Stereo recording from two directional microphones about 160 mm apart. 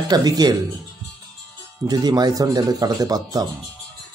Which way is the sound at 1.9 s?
25° right (ahead or behind).